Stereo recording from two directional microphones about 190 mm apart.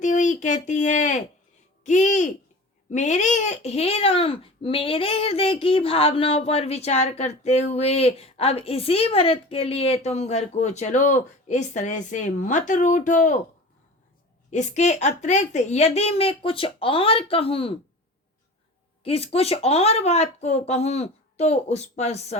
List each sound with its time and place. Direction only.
0.0 s speech: 40° left (ahead or behind)
1.8 s a sound: 40° left (ahead or behind)
2.9 s a child's voice: 40° left (ahead or behind)
14.5 s a child's voice: 40° left (ahead or behind)
19.0 s a child's voice: 30° left (ahead or behind)